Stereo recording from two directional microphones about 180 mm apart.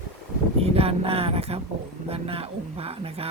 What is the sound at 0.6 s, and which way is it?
Speech, 35° right (ahead or behind).